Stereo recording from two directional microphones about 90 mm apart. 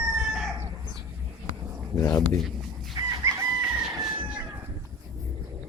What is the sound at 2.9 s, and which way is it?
Chicken, 40° right (ahead or behind).